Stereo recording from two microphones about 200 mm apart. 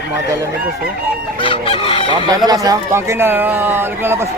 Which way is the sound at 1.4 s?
25° left (ahead or behind).